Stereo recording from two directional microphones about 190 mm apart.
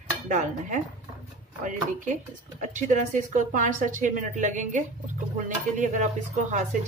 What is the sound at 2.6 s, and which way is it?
Speech, 40° right (ahead or behind).